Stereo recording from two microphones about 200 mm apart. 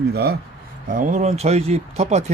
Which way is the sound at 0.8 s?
40° right (ahead or behind).